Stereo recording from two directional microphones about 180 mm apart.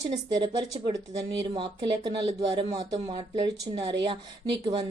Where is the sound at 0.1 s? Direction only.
25° right (ahead or behind).